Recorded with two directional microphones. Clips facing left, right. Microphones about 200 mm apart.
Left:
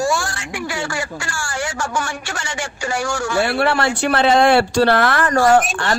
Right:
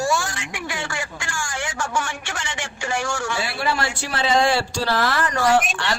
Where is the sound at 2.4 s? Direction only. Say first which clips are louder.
Left 5 dB; 40° left (ahead or behind).